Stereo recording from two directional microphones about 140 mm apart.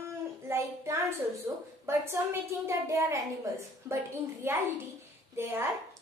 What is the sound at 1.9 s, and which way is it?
A woman's voice, 20° right (ahead or behind).